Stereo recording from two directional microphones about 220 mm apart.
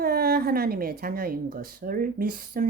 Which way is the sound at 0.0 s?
45° right (ahead or behind).